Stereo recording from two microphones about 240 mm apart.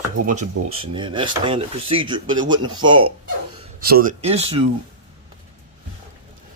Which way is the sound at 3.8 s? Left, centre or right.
Right.